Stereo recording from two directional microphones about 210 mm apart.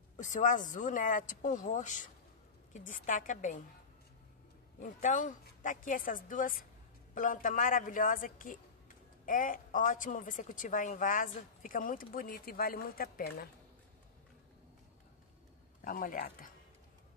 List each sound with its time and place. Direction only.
0.2 s a woman's voice: 35° left (ahead or behind)
4.7 s a woman's voice: 35° left (ahead or behind)
15.8 s a woman's voice: 40° left (ahead or behind)